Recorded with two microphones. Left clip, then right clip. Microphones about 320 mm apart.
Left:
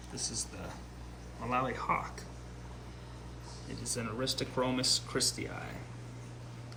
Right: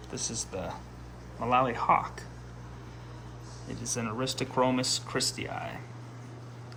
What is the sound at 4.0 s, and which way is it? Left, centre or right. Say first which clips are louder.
Speech: right 2 dB; centre.